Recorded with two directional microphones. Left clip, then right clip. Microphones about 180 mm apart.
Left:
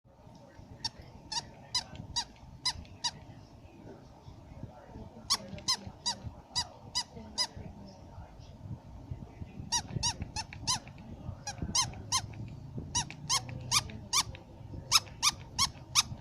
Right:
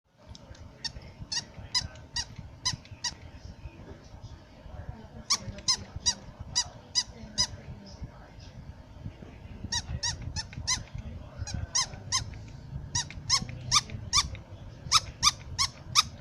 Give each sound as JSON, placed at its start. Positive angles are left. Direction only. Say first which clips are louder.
{"t": 0.8, "sound": "squeak", "louder": "right 1 dB", "side_deg": 15}
{"t": 5.3, "sound": "squeak", "louder": "right 3 dB", "side_deg": 15}
{"t": 9.6, "sound": "squeak", "louder": "even", "side_deg": 20}